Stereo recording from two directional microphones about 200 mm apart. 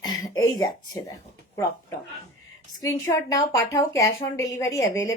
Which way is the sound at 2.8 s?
15° left (ahead or behind).